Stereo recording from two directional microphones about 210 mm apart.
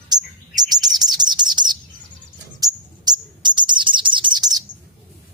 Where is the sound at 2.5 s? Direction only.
20° right (ahead or behind).